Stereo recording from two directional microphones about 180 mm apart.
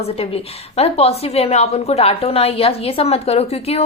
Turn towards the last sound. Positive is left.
turn(degrees=35)  # may be behind; listen again after turning